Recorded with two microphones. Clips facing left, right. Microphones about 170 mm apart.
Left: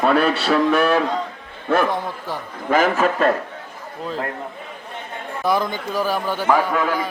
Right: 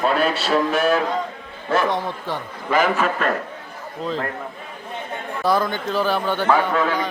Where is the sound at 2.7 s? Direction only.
45° left (ahead or behind).